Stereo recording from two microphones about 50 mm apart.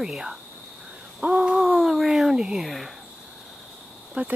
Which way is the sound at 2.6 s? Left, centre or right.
Centre.